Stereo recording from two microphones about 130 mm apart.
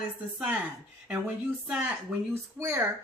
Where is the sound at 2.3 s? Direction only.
20° right (ahead or behind).